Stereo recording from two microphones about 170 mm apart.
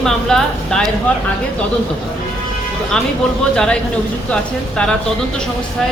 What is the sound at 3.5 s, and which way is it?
A woman's voice, 5° left (ahead or behind).